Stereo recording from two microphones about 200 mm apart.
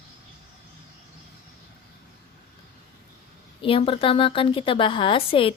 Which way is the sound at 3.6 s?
25° left (ahead or behind).